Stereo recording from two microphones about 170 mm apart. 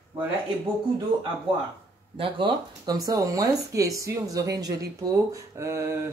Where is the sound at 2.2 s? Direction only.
30° right (ahead or behind).